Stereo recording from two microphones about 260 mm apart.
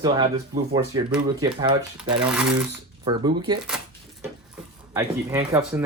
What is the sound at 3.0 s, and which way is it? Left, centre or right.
Speech, centre.